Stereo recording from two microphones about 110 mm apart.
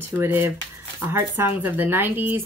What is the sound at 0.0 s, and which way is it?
Speech, 20° right (ahead or behind).